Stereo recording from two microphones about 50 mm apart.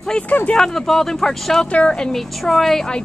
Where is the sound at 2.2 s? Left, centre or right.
Centre.